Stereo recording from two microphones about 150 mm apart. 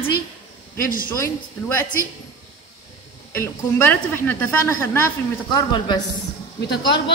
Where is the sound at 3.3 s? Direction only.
15° left (ahead or behind).